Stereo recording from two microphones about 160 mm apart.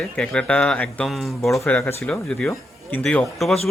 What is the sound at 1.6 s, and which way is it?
Speech, 10° left (ahead or behind).